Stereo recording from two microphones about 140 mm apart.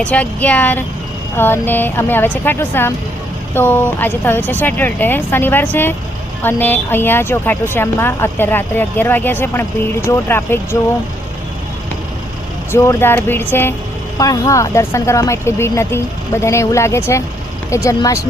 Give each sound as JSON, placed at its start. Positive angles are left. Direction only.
{"t": 0.0, "sound": "speech", "side_deg": 10}
{"t": 12.7, "sound": "speech", "side_deg": 20}